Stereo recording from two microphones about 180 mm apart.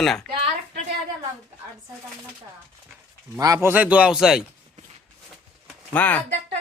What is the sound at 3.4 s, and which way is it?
Speech, 15° right (ahead or behind).